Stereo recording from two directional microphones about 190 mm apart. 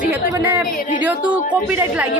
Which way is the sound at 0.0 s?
10° right (ahead or behind).